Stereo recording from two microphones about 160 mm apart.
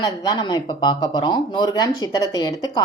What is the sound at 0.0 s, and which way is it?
Speech, 25° left (ahead or behind).